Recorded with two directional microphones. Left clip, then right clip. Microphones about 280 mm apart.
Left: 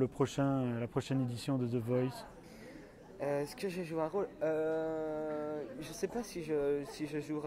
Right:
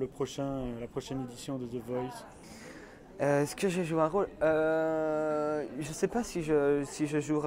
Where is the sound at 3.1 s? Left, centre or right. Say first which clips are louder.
Right 8 dB; right.